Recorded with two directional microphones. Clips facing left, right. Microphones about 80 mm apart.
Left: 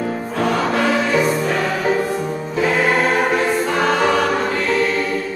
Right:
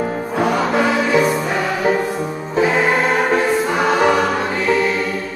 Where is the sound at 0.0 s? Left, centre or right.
Centre.